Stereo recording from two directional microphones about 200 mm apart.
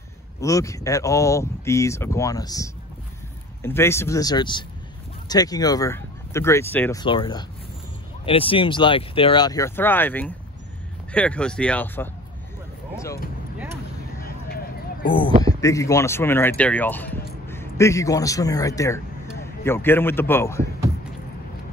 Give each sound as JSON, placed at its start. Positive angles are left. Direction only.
{"t": 0.4, "sound": "speech", "side_deg": 15}
{"t": 7.0, "sound": "speech", "side_deg": 25}
{"t": 14.2, "sound": "a sound", "side_deg": 50}
{"t": 15.4, "sound": "a man's voice", "side_deg": 15}